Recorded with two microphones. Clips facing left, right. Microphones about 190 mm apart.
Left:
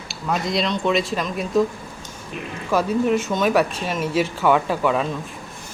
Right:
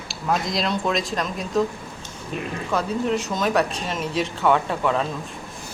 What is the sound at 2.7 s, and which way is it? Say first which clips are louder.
Speech: left 4 dB; 5° left (ahead or behind).